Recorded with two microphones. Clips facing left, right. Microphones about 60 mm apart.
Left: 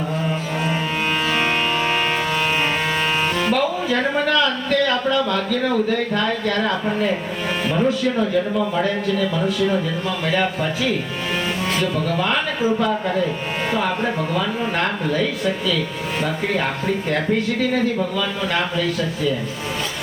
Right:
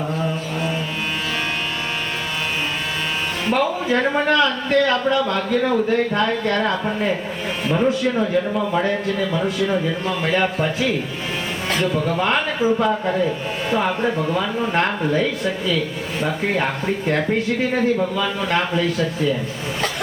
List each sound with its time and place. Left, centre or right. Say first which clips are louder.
3.5 s a man's voice: right 1 dB; right
7.7 s speech: right 2 dB; centre
8.5 s a man's voice: even; centre
12.0 s a man's voice: right 1 dB; centre
14.3 s a man's voice: right 1 dB; centre